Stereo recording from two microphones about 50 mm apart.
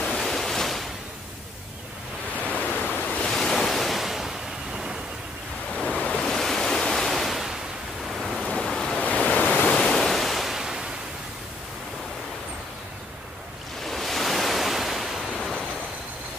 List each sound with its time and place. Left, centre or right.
0.0 s waves: centre
2.4 s waves: left
3.3 s waves: centre
5.8 s waves: left; by 7.5 s centre
8.4 s waves: centre
9.6 s ocean: centre
13.8 s waves: centre
15.2 s waves: centre